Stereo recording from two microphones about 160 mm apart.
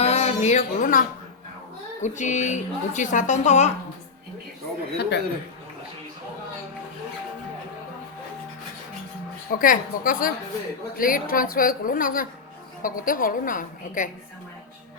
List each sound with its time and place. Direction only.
0.0 s music: 40° left (ahead or behind)
2.0 s a woman's voice: 50° left (ahead or behind)
4.9 s a man's voice: 90° left
9.5 s a woman's voice: 60° left (ahead or behind)